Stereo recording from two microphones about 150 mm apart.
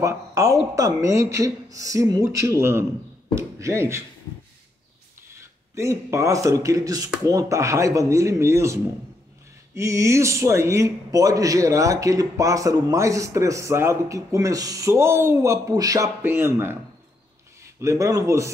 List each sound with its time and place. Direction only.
0.0 s a man's voice: 20° right (ahead or behind)
5.8 s a man's voice: 20° right (ahead or behind)
9.8 s a man's voice: 20° right (ahead or behind)
17.7 s a man's voice: 20° right (ahead or behind)